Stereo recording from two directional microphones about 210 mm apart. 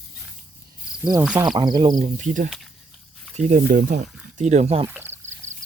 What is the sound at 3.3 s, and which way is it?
Speech, 40° right (ahead or behind).